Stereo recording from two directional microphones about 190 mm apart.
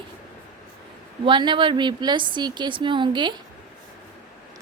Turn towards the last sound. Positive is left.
turn(degrees=-25)  # may be behind; listen again after turning